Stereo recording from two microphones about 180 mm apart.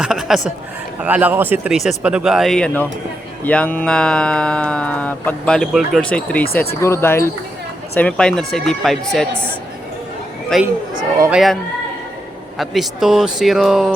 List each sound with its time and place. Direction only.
0.0 s a man's voice: centre (ahead or behind)
10.5 s speech: centre (ahead or behind)
12.5 s speech: centre (ahead or behind)